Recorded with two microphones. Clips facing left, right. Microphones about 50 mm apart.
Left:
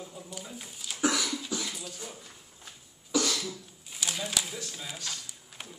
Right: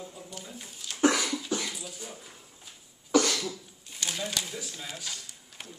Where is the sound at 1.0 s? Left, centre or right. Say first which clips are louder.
Right 4 dB; right.